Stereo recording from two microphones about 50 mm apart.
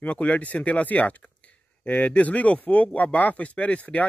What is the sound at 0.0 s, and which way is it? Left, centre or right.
Speech, left.